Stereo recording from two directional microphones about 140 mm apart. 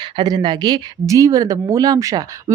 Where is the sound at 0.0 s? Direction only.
30° right (ahead or behind).